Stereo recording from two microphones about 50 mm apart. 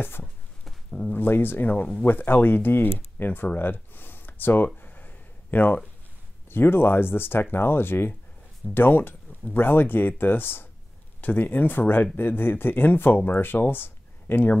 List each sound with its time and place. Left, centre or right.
1.1 s speech: left
3.5 s a sound: left
6.5 s speech: left